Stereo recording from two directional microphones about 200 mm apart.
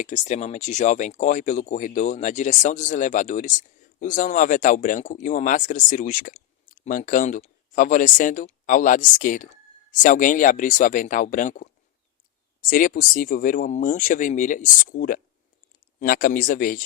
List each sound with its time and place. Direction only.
0.0 s speech: 35° left (ahead or behind)